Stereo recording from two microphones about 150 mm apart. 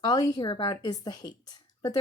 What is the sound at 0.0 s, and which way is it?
Speech, 25° left (ahead or behind).